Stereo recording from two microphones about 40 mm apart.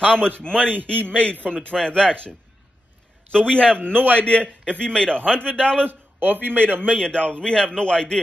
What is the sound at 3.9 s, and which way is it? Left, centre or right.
Speech, right.